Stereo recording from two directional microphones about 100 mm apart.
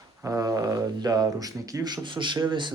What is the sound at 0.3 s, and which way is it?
A man's voice, 35° right (ahead or behind).